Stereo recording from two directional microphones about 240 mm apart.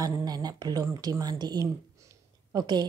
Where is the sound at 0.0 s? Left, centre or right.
Centre.